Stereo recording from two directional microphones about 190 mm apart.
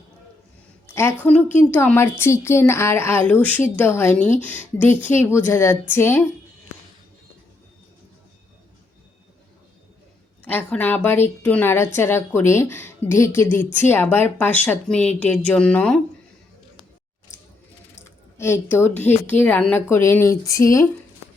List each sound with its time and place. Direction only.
0.9 s speech: 10° left (ahead or behind)
10.5 s speech: 10° left (ahead or behind)
18.3 s speech: 15° left (ahead or behind)